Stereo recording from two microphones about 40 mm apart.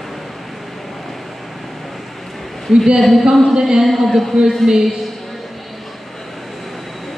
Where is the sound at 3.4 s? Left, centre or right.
Centre.